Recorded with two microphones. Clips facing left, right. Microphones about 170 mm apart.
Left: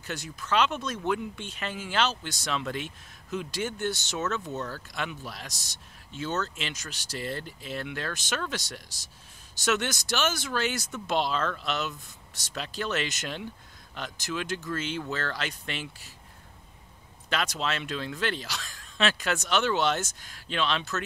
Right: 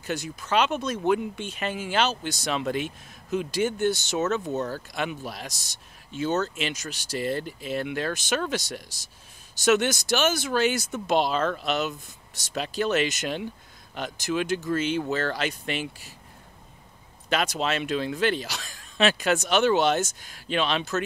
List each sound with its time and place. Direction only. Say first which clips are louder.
0.0 s speech: right 6 dB; 10° right (ahead or behind)
4.2 s speech: right 5 dB; 20° right (ahead or behind)
17.3 s speech: right 4 dB; 15° right (ahead or behind)